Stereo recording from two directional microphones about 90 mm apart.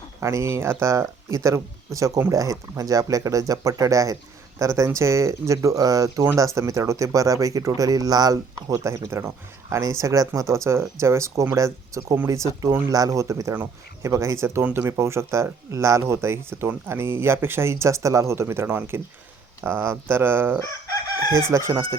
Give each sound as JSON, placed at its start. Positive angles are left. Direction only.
{"t": 0.2, "sound": "speech", "side_deg": -35}